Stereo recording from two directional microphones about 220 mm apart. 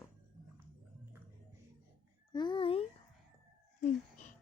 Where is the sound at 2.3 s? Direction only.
20° left (ahead or behind).